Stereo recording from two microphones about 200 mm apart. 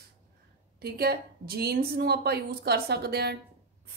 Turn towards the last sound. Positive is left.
turn(degrees=-55)  # may be behind; listen again after turning